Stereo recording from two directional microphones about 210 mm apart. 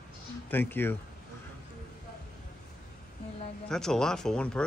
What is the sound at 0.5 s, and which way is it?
Speech, 10° left (ahead or behind).